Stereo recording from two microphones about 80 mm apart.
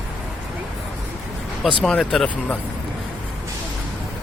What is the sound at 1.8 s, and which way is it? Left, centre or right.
Speech, centre.